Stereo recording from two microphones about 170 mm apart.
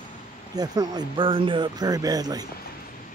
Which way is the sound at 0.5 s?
20° right (ahead or behind).